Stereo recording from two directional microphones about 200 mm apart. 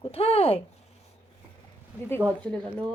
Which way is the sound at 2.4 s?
5° left (ahead or behind).